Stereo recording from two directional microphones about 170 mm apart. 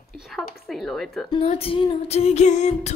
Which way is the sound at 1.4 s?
35° left (ahead or behind).